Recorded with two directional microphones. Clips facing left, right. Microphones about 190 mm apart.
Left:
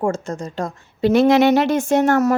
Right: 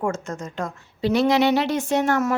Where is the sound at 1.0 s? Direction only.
50° left (ahead or behind).